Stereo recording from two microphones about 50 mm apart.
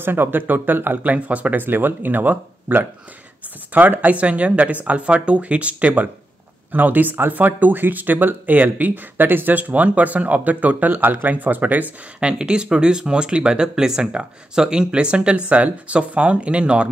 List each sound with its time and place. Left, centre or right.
0.0 s speech: right
6.7 s speech: right
12.2 s speech: centre